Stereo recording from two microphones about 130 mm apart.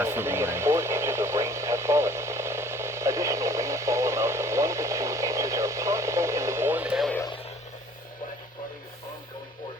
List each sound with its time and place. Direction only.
0.0 s radio: 20° right (ahead or behind)